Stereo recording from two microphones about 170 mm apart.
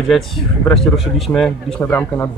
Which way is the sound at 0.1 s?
Centre (ahead or behind).